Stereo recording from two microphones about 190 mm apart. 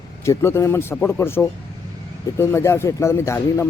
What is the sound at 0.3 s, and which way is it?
Speech, 15° left (ahead or behind).